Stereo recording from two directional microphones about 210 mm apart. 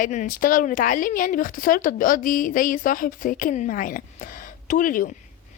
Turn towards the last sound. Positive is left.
turn(degrees=40)  # may be behind; listen again after turning